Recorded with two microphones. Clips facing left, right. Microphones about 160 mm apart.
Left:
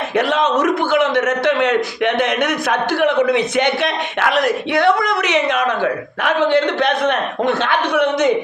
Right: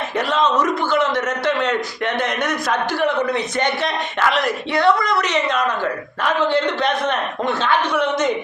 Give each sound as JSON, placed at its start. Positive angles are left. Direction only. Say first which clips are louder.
{"t": 0.2, "sound": "a man's voice", "louder": "left 2 dB", "side_deg": 65}